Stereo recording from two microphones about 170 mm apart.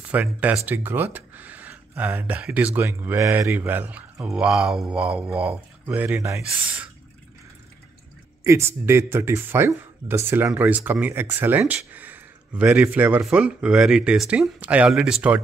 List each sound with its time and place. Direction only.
0.1 s speech: 10° right (ahead or behind)
8.5 s speech: 15° right (ahead or behind)